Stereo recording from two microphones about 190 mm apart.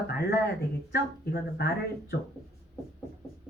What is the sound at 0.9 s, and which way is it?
Speech, 60° left (ahead or behind).